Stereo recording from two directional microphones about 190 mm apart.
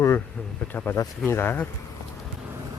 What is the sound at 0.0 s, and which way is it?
Speech, 10° left (ahead or behind).